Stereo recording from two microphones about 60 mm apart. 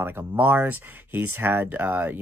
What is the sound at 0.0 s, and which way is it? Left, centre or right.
Speech, right.